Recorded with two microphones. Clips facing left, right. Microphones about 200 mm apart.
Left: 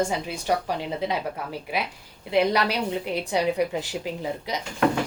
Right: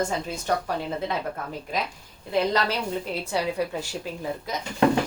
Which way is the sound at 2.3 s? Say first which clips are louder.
Left 2 dB; 15° left (ahead or behind).